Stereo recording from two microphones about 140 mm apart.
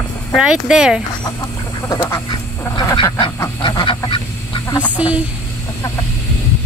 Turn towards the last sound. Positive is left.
turn(degrees=-10)  # may be behind; listen again after turning